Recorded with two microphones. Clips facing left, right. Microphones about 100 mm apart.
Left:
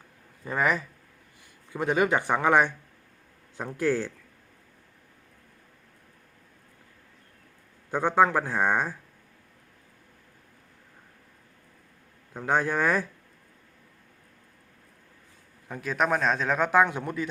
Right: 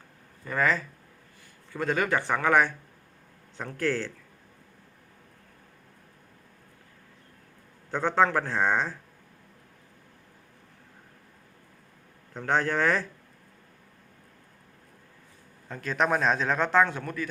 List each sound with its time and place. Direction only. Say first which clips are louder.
0.4 s a man's voice: even; 20° left (ahead or behind)
7.9 s a man's voice: left 2 dB; 10° left (ahead or behind)
12.3 s a man's voice: left 1 dB; 10° left (ahead or behind)
15.7 s a man's voice: even; 5° left (ahead or behind)